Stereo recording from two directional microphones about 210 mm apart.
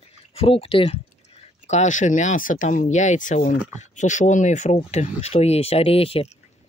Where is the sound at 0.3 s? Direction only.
25° left (ahead or behind).